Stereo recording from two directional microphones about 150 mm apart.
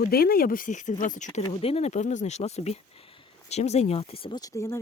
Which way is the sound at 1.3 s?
40° left (ahead or behind).